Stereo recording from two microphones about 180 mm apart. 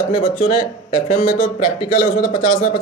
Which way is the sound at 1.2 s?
55° left (ahead or behind).